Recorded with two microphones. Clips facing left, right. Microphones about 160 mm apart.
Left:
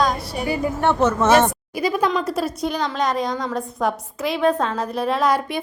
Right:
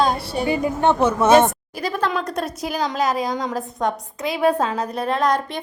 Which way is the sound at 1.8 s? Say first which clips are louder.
Left 3 dB; 10° left (ahead or behind).